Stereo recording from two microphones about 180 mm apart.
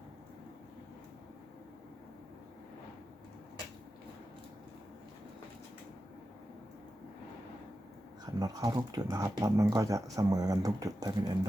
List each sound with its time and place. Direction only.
8.2 s speech: 20° right (ahead or behind)